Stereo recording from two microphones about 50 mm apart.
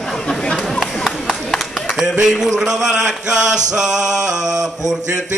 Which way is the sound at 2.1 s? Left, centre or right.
Centre.